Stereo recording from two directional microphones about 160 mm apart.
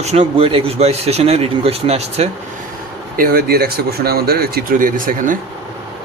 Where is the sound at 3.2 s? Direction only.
65° right (ahead or behind).